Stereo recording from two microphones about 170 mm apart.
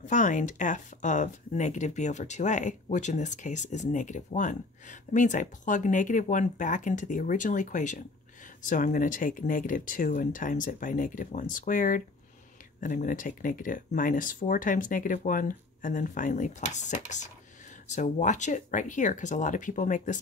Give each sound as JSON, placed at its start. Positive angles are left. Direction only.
{"t": 0.0, "sound": "speech", "side_deg": 50}